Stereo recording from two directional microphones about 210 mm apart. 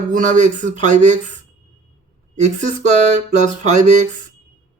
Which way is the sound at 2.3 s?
35° right (ahead or behind).